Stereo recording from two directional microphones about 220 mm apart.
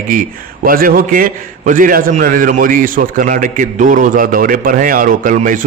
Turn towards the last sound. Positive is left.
turn(degrees=-35)  # may be behind; listen again after turning